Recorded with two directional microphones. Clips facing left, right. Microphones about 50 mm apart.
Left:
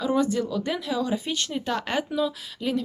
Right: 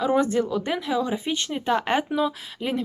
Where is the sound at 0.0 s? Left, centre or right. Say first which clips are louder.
Right 2 dB; right.